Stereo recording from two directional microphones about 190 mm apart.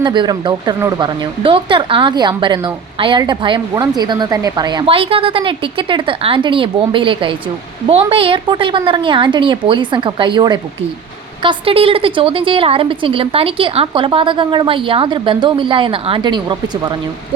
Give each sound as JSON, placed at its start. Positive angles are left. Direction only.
{"t": 0.0, "sound": "speech", "side_deg": -25}